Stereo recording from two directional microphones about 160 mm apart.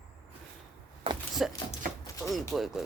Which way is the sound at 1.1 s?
35° right (ahead or behind).